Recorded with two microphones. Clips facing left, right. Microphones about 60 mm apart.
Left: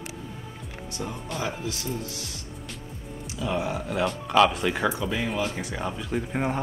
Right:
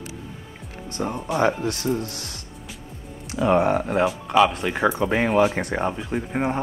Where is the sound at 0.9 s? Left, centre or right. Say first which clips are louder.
Right 9 dB; right.